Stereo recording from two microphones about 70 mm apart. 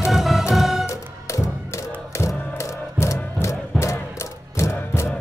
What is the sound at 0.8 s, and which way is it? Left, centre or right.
Music, left.